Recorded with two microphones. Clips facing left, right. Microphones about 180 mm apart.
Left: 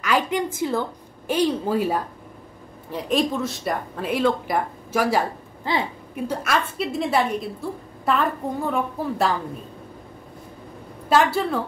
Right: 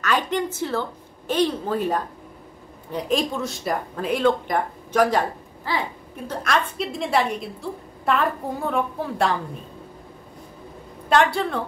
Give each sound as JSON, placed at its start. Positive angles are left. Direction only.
{"t": 0.0, "sound": "a woman's voice", "side_deg": 10}
{"t": 5.7, "sound": "speech", "side_deg": 20}
{"t": 6.2, "sound": "speech", "side_deg": 5}
{"t": 11.1, "sound": "speech", "side_deg": 5}